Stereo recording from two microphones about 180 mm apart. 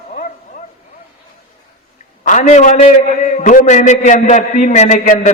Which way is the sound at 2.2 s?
45° left (ahead or behind).